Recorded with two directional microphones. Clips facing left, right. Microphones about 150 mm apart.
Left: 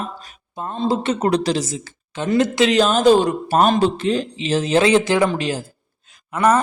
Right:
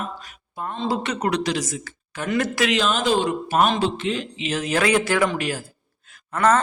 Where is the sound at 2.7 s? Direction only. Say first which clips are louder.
Left 8 dB; 40° left (ahead or behind); by 5.6 s 20° left (ahead or behind).